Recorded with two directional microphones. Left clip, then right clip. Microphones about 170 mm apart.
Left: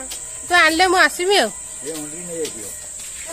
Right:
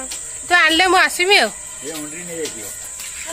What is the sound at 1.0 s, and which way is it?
Speech, 15° left (ahead or behind).